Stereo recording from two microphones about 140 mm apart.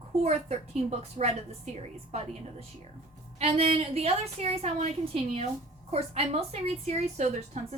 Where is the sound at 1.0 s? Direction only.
50° right (ahead or behind).